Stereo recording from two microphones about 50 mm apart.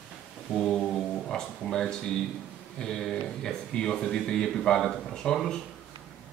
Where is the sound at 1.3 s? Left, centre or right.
Centre.